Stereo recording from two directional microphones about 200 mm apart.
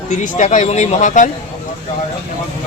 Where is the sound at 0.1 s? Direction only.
40° left (ahead or behind).